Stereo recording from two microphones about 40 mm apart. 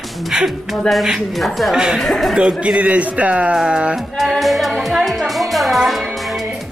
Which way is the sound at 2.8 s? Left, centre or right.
Right.